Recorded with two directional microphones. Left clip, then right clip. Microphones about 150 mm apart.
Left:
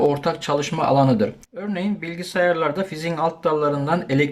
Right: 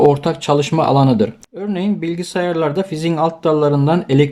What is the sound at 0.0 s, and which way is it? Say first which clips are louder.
Speech: right 6 dB; 20° right (ahead or behind).